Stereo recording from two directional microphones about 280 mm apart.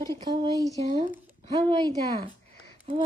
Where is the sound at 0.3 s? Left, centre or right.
Centre.